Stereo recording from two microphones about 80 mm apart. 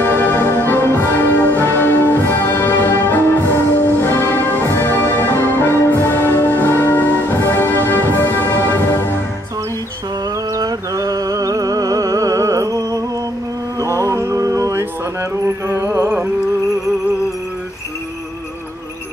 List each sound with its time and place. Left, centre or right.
0.0 s music: left
10.6 s music: right